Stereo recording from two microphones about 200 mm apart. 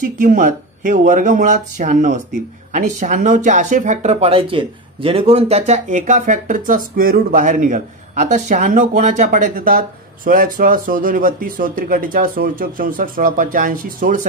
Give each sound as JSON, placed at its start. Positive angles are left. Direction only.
{"t": 0.0, "sound": "speech", "side_deg": -40}